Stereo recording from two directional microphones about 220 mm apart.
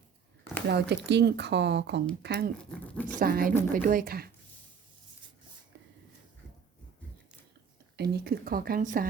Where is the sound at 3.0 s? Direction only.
40° right (ahead or behind).